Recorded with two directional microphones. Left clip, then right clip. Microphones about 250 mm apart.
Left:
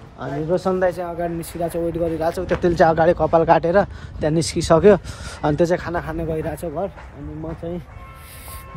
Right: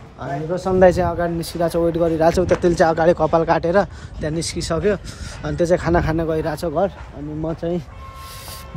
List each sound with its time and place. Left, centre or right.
0.2 s speech: centre
0.7 s speech: right
1.2 s speech: centre
2.1 s speech: right
2.5 s speech: centre
6.1 s speech: centre